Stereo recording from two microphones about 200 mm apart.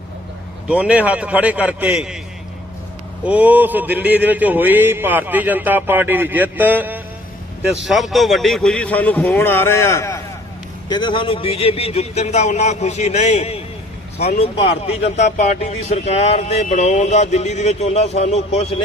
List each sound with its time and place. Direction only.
0.7 s a man's voice: 5° right (ahead or behind)
3.2 s a man's voice: 10° right (ahead or behind); by 18.8 s 30° left (ahead or behind)